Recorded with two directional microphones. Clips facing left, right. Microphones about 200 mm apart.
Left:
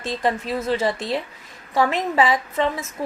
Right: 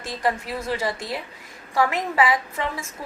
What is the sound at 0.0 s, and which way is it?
Speech, 25° left (ahead or behind).